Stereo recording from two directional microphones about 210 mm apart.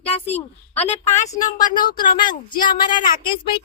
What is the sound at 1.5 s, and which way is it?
Speech, 20° left (ahead or behind).